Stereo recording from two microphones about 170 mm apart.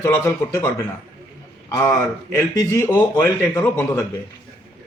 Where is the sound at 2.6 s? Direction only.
15° left (ahead or behind).